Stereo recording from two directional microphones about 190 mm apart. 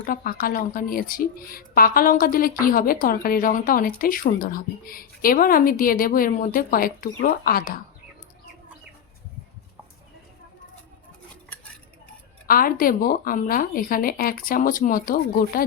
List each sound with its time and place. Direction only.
0.0 s speech: 50° left (ahead or behind)
12.5 s speech: 50° left (ahead or behind)